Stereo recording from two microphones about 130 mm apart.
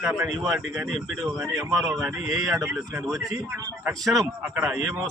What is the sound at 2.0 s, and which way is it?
Speech, centre (ahead or behind).